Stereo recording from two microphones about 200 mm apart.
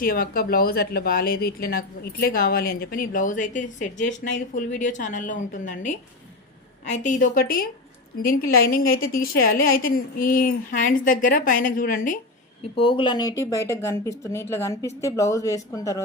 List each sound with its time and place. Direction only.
0.0 s speech: 45° left (ahead or behind)
6.9 s speech: 40° left (ahead or behind)
12.7 s speech: 25° left (ahead or behind)